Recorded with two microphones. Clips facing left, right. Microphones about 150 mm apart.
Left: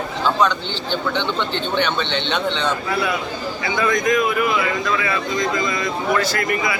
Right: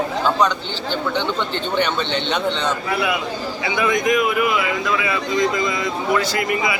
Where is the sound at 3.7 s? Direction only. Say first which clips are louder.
Even; 20° right (ahead or behind).